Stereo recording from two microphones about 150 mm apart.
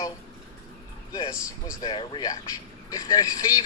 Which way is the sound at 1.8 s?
35° left (ahead or behind).